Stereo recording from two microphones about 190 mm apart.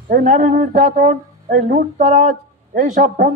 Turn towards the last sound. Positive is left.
turn(degrees=-45)  # may be behind; listen again after turning